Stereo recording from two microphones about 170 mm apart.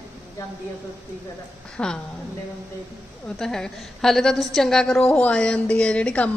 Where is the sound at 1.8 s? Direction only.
5° left (ahead or behind).